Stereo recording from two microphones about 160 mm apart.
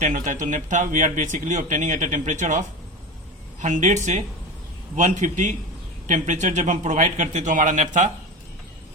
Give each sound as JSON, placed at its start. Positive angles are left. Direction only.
{"t": 0.0, "sound": "speech", "side_deg": -55}